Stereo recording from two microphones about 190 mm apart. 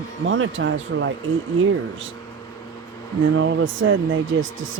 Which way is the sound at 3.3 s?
90° right.